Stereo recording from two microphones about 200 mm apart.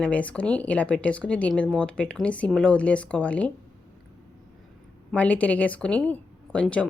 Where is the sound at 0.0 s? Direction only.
5° left (ahead or behind).